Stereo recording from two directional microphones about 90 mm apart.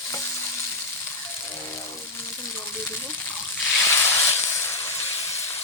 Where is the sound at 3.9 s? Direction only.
25° left (ahead or behind).